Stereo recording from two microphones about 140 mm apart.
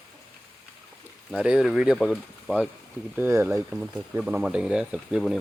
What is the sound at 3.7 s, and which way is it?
Speech, 5° right (ahead or behind).